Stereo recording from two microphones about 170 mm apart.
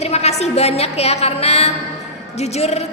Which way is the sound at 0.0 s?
40° left (ahead or behind).